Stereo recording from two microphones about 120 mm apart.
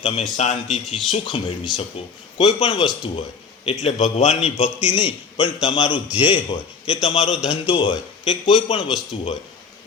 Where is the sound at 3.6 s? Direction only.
60° left (ahead or behind); by 4.7 s 80° left.